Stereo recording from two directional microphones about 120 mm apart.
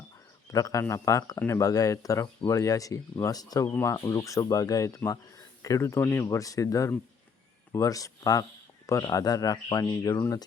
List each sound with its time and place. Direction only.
0.5 s speech: 30° left (ahead or behind)